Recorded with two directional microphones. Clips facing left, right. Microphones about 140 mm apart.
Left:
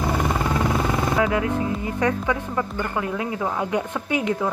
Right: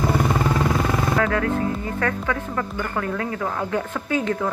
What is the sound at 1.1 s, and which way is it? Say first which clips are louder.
Speech: even; 15° left (ahead or behind).